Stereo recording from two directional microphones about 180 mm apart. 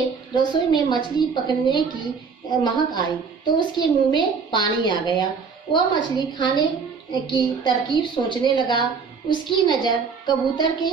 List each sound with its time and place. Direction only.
0.3 s a woman's voice: 25° left (ahead or behind)